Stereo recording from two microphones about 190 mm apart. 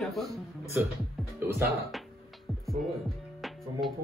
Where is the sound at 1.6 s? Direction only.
Centre (ahead or behind).